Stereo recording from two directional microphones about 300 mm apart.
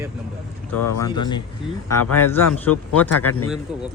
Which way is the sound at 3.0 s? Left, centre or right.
Left.